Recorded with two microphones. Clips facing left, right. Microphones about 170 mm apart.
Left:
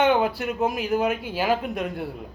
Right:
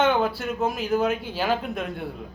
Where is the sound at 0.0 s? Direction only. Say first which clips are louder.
Left 1 dB; 15° left (ahead or behind).